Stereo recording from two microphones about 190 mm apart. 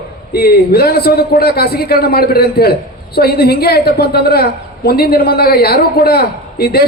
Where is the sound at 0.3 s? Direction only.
55° left (ahead or behind).